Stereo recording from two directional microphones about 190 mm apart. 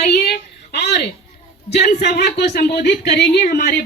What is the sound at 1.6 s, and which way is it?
A woman's voice, 60° left (ahead or behind).